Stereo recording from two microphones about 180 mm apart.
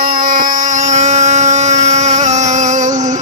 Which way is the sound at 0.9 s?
40° right (ahead or behind).